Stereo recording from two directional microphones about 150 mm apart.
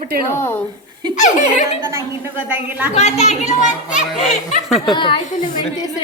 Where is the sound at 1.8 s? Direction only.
15° right (ahead or behind).